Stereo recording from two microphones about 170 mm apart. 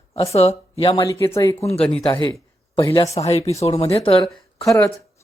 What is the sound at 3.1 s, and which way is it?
Speech, 35° left (ahead or behind).